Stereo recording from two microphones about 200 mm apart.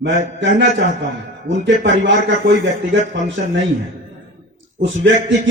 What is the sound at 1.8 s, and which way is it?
Speech, 65° right (ahead or behind).